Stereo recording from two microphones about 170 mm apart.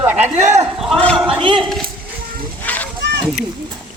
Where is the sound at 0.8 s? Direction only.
5° left (ahead or behind).